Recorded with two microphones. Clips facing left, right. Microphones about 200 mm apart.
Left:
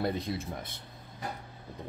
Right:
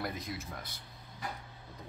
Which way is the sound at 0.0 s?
30° left (ahead or behind).